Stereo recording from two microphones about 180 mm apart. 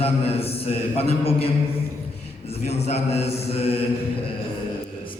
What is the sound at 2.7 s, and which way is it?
A man's voice, 35° left (ahead or behind).